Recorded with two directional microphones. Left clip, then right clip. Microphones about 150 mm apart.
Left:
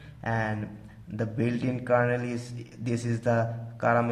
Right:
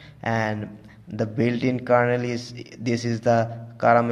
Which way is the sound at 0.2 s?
30° right (ahead or behind).